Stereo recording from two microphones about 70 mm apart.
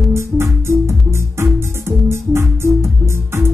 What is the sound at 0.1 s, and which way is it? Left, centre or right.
Music, right.